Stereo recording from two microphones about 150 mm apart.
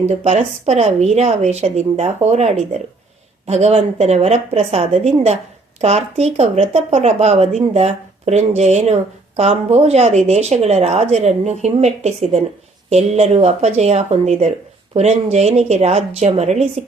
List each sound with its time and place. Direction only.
0.0 s speech: 45° right (ahead or behind)